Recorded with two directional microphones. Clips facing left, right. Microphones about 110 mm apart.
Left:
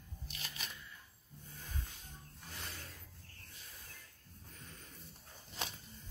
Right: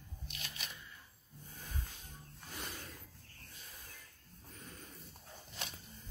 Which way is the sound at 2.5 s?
15° right (ahead or behind).